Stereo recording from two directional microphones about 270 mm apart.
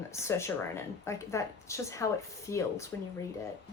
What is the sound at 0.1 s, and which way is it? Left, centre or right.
Speech, centre.